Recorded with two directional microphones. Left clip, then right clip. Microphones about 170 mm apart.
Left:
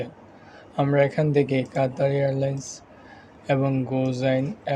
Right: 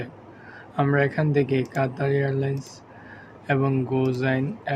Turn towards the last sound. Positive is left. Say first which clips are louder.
# left 2 dB
turn(degrees=25)  # may be behind; listen again after turning